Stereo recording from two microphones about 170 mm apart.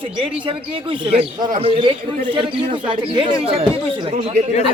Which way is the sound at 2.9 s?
30° right (ahead or behind).